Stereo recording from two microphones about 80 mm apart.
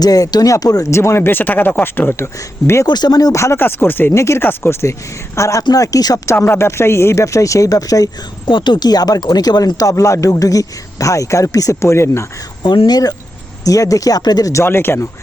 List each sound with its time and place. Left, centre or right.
0.0 s speech: left
0.9 s speech: left
2.8 s speech: left
3.3 s speech: left
3.6 s speech: left
4.1 s speech: left
6.2 s speech: left
8.4 s speech: left
9.9 s speech: left
12.6 s speech: left
13.7 s speech: left
14.5 s speech: left